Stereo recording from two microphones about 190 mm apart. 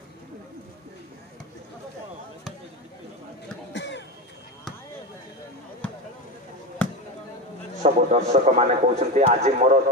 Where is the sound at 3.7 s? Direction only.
65° left (ahead or behind).